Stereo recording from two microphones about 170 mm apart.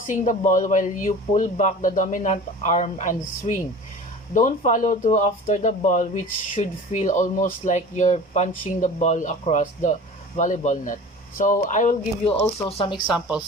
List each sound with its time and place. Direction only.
0.1 s speech: 50° left (ahead or behind)
12.6 s speech: 35° left (ahead or behind)
12.9 s speech: 5° right (ahead or behind)